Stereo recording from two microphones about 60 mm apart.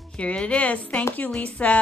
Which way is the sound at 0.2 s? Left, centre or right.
Centre.